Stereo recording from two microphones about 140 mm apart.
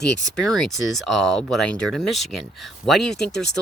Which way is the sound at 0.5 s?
Centre (ahead or behind).